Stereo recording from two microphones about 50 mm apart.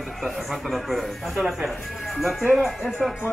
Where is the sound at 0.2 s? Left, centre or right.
Centre.